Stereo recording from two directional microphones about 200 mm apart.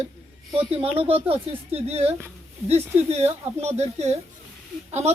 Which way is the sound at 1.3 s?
30° right (ahead or behind).